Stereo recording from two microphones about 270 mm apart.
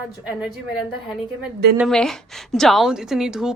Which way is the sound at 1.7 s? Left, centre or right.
Centre.